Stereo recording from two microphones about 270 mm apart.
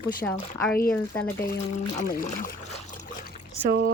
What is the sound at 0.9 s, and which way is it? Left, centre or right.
Speech, centre.